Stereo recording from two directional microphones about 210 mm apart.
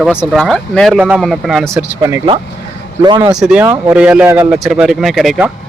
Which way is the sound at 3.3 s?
5° right (ahead or behind).